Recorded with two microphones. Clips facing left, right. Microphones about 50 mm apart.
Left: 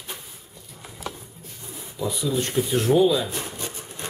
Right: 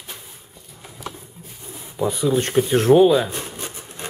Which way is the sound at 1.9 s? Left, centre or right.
Right.